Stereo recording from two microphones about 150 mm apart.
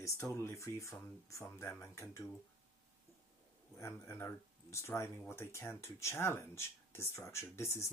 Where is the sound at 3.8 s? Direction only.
15° left (ahead or behind).